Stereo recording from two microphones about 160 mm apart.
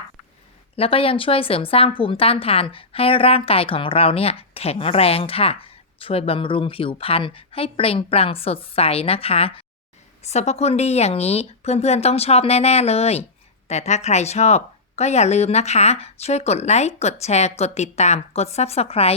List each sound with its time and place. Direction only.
0.8 s speech: 35° left (ahead or behind)